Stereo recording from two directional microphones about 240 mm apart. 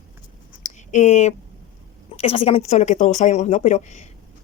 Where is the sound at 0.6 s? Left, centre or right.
Left.